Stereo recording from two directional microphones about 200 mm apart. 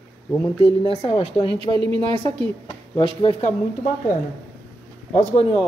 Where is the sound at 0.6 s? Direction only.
30° left (ahead or behind).